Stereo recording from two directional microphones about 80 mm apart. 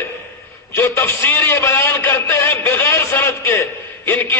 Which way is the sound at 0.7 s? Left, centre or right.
Left.